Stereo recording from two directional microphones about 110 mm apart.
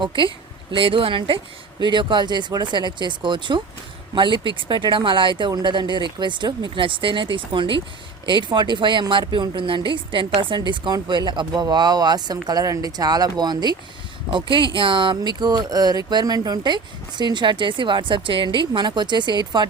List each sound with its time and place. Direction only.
0.0 s a woman's voice: 50° right (ahead or behind)